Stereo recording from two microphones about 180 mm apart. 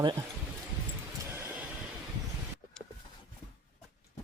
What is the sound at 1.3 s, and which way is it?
Vehicle, 15° right (ahead or behind).